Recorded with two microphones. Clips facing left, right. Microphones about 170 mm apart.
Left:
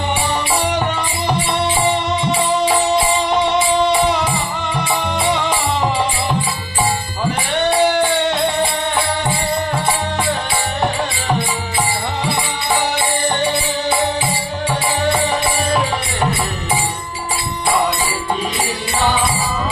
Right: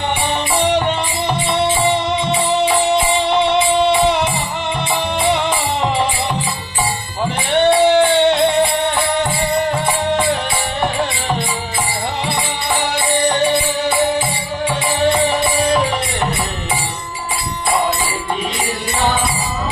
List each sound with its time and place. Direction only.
0.7 s music: 25° right (ahead or behind)
5.2 s music: 25° right (ahead or behind)
7.3 s music: 25° right (ahead or behind)